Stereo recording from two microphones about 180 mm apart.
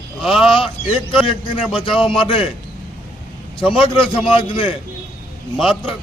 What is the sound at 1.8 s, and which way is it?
Speech, 30° left (ahead or behind).